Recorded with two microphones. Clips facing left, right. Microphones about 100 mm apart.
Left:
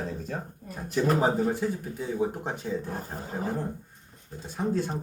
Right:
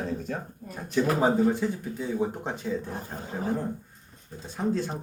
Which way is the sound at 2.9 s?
40° left (ahead or behind).